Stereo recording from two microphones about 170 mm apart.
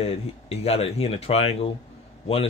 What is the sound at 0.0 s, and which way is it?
Speech, 35° left (ahead or behind).